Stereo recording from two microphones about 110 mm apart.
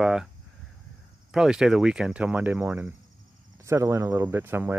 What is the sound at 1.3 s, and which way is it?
Speech, 5° right (ahead or behind).